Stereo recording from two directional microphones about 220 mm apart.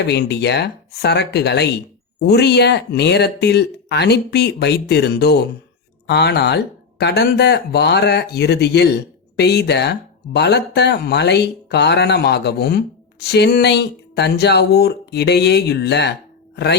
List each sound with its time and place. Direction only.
0.1 s speech: 50° left (ahead or behind)